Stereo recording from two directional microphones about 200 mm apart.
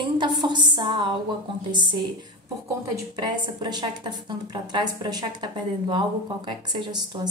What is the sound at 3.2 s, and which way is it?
A woman's voice, 20° right (ahead or behind).